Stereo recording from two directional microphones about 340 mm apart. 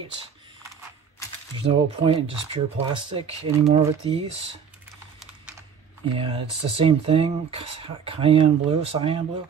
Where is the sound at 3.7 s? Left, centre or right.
Centre.